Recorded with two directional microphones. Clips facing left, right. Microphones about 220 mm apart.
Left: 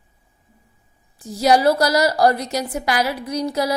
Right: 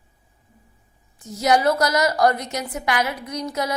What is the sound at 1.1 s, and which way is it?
A woman's voice, 30° left (ahead or behind).